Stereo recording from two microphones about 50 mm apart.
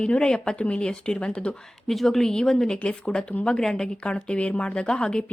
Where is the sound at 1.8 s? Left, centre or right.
Centre.